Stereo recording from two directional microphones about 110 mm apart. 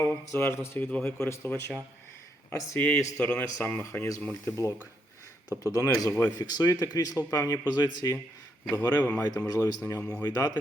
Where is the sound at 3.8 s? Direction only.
25° left (ahead or behind).